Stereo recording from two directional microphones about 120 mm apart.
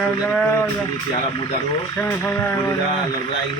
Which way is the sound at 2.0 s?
20° left (ahead or behind).